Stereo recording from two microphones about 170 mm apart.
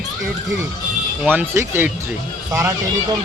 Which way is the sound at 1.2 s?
10° right (ahead or behind).